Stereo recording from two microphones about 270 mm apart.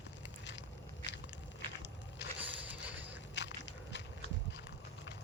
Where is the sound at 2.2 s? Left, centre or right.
Left.